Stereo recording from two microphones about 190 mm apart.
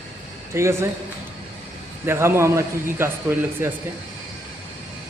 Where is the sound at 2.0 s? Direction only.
15° right (ahead or behind).